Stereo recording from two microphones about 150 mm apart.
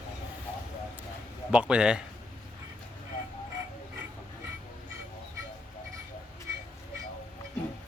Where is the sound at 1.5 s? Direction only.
5° right (ahead or behind).